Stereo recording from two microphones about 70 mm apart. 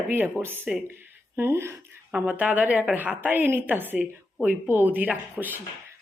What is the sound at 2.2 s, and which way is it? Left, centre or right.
A woman's voice, right.